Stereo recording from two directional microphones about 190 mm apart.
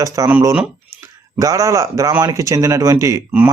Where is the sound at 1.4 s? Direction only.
15° right (ahead or behind).